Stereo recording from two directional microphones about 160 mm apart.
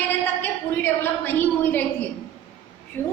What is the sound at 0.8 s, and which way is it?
A woman's voice, 15° left (ahead or behind).